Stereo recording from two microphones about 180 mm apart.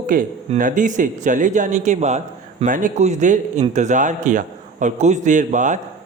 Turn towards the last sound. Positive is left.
turn(degrees=-45)  # may be behind; listen again after turning